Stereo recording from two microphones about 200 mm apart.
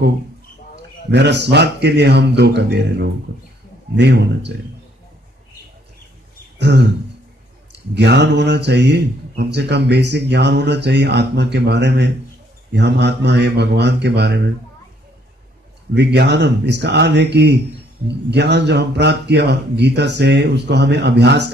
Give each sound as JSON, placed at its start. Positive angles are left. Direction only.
{"t": 1.1, "sound": "speech", "side_deg": -60}
{"t": 7.9, "sound": "speech", "side_deg": -60}
{"t": 15.9, "sound": "speech", "side_deg": -60}